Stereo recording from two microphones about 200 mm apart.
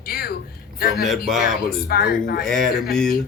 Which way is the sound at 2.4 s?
Centre (ahead or behind).